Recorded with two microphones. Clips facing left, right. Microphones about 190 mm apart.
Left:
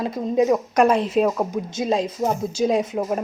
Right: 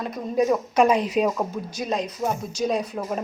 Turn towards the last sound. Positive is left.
turn(degrees=25)  # may be behind; listen again after turning